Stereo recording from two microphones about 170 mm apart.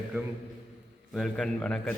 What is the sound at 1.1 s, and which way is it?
Speech, 5° left (ahead or behind).